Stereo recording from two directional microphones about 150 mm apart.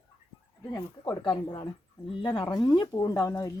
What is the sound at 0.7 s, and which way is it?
Speech, 25° left (ahead or behind).